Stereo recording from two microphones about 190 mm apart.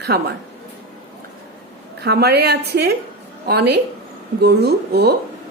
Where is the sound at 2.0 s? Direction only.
55° right (ahead or behind).